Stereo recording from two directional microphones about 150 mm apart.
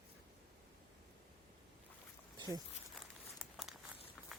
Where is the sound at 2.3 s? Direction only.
25° right (ahead or behind).